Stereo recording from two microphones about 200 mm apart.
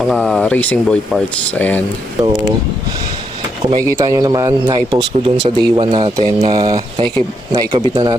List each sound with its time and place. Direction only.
0.1 s speech: 5° left (ahead or behind)
3.7 s speech: 15° right (ahead or behind)